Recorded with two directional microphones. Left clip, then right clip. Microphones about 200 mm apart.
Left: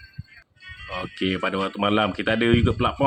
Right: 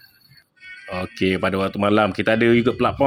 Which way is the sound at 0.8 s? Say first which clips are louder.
Right 4 dB; 15° right (ahead or behind).